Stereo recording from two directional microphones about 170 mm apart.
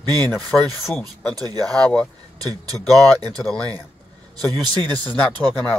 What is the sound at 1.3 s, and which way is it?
Speech, 25° right (ahead or behind).